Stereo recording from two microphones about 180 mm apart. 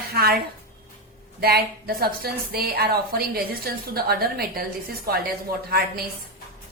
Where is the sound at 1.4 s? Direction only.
60° right (ahead or behind).